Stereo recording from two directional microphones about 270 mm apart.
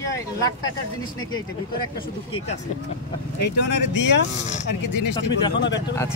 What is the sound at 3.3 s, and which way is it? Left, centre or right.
Speech, left.